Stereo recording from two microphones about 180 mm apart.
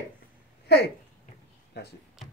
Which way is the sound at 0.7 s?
65° left (ahead or behind).